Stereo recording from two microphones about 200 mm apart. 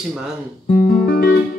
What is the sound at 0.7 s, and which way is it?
Music, 45° left (ahead or behind).